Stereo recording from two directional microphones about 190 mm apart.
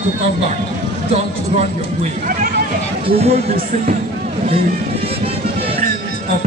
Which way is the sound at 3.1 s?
35° right (ahead or behind).